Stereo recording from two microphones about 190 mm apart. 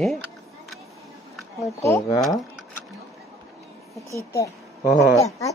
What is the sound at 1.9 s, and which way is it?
Speech, 15° left (ahead or behind).